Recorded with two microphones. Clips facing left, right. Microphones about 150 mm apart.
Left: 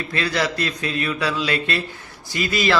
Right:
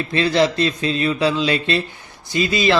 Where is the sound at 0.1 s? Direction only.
25° right (ahead or behind).